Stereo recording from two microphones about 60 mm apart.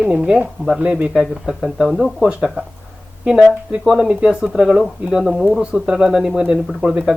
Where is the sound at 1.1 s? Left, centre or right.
Centre.